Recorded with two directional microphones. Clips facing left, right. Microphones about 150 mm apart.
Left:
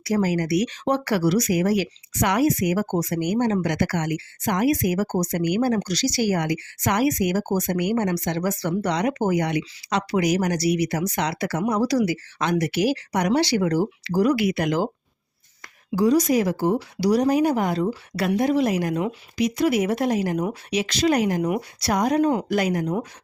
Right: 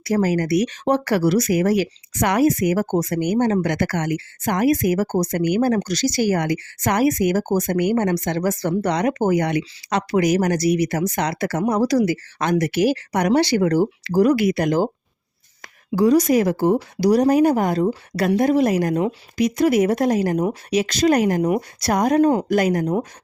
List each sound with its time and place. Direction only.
0.0 s speech: 50° right (ahead or behind)
16.0 s speech: 55° right (ahead or behind)